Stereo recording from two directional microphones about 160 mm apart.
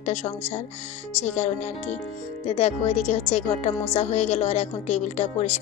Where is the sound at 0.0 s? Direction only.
45° left (ahead or behind).